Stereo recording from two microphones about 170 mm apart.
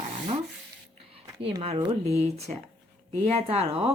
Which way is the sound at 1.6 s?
40° right (ahead or behind).